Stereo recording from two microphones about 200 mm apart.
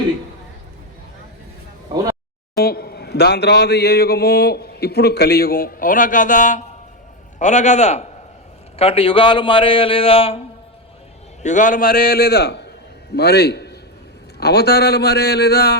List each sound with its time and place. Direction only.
2.6 s a man's voice: 50° left (ahead or behind); by 10.4 s 30° left (ahead or behind)
11.4 s a man's voice: 40° left (ahead or behind)